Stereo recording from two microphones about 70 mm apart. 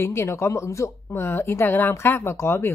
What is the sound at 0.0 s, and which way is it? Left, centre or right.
Speech, left.